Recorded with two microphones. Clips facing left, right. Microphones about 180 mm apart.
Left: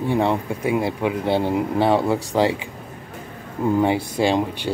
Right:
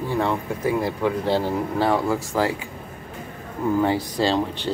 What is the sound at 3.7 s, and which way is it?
Speech, 20° left (ahead or behind).